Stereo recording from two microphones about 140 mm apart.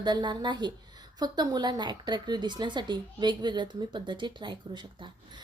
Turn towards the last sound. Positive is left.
turn(degrees=-35)  # may be behind; listen again after turning